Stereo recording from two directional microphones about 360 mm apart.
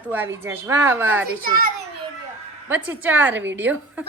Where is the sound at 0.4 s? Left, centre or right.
Centre.